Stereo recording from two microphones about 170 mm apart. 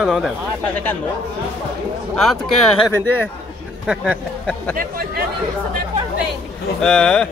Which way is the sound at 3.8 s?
5° right (ahead or behind).